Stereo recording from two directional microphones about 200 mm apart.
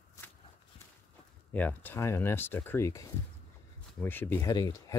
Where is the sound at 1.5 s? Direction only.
10° left (ahead or behind).